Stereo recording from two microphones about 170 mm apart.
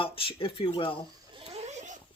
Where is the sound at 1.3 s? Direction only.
40° right (ahead or behind).